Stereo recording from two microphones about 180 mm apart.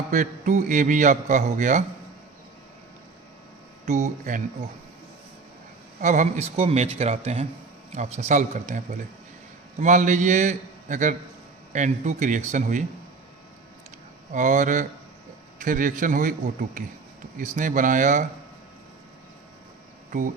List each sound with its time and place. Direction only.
0.1 s a man's voice: 45° right (ahead or behind)
3.8 s a man's voice: 40° right (ahead or behind)
6.0 s a man's voice: 45° right (ahead or behind)
9.8 s a man's voice: 45° right (ahead or behind)
14.3 s a man's voice: 45° right (ahead or behind)